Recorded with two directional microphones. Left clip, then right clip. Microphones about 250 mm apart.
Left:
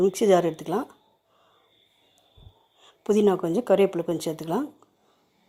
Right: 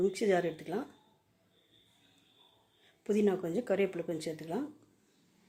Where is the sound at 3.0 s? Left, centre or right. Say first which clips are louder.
Left 9 dB; left.